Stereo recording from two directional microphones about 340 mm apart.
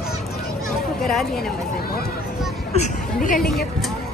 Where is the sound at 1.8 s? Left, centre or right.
Left.